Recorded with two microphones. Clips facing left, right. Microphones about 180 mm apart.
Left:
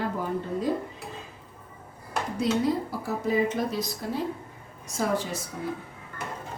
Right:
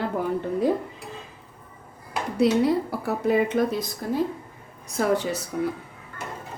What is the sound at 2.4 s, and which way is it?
Speech, 65° right (ahead or behind).